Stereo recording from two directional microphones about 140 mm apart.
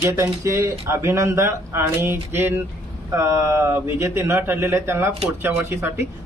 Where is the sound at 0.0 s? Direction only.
20° right (ahead or behind).